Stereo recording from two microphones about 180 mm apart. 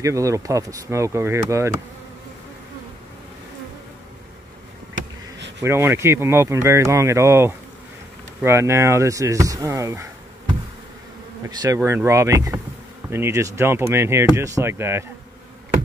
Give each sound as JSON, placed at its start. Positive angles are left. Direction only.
{"t": 0.0, "sound": "speech", "side_deg": -15}
{"t": 5.6, "sound": "speech", "side_deg": -15}
{"t": 11.4, "sound": "speech", "side_deg": -15}